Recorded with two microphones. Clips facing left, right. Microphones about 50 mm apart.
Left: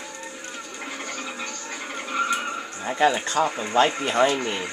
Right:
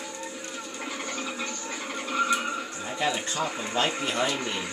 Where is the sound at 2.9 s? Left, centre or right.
Left.